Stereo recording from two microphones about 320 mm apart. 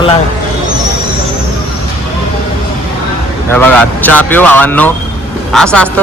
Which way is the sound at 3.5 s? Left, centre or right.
Centre.